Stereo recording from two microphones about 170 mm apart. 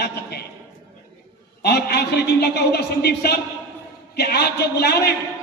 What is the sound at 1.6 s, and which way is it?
A woman's voice, 70° left (ahead or behind).